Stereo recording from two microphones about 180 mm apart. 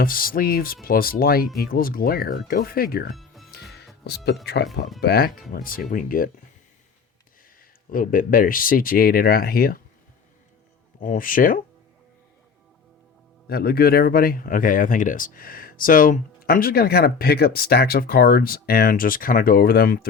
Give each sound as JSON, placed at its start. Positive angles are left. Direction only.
{"t": 0.0, "sound": "speech", "side_deg": 55}
{"t": 3.2, "sound": "music", "side_deg": 0}
{"t": 3.5, "sound": "music", "side_deg": 65}
{"t": 4.0, "sound": "speech", "side_deg": 65}
{"t": 7.9, "sound": "speech", "side_deg": 50}
{"t": 11.0, "sound": "speech", "side_deg": 50}
{"t": 13.5, "sound": "speech", "side_deg": 55}